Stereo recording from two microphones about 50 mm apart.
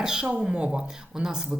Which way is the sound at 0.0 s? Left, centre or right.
Centre.